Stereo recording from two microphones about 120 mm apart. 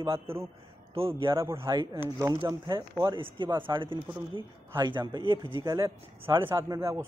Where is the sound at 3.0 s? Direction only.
45° right (ahead or behind).